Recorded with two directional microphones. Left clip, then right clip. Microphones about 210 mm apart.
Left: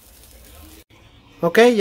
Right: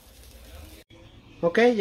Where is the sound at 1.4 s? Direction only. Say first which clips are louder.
Left 7 dB; 40° left (ahead or behind).